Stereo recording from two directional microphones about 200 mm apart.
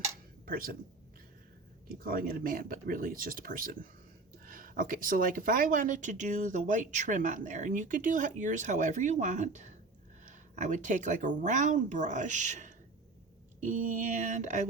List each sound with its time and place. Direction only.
0.4 s speech: 45° right (ahead or behind)
2.0 s speech: 45° right (ahead or behind)